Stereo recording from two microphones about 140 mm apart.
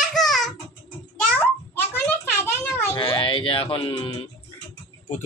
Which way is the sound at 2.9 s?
40° left (ahead or behind).